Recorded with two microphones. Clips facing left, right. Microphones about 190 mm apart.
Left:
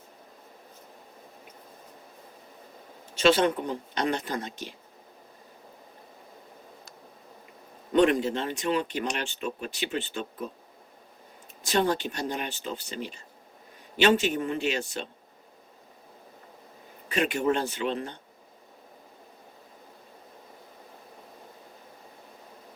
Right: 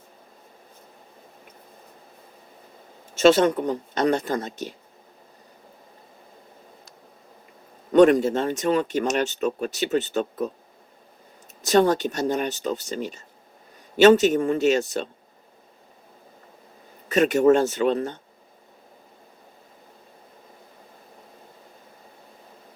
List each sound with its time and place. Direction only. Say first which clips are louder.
3.2 s speech: right 5 dB; 45° right (ahead or behind)
7.9 s speech: right 7 dB; 45° right (ahead or behind)
11.6 s speech: right 7 dB; 45° right (ahead or behind)
17.1 s speech: right 9 dB; 45° right (ahead or behind)